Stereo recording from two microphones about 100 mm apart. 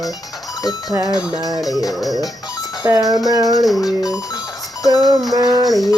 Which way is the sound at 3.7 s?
40° left (ahead or behind).